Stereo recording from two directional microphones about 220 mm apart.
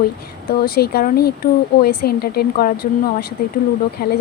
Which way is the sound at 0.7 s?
45° left (ahead or behind).